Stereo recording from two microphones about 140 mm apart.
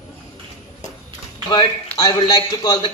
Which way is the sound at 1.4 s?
30° left (ahead or behind).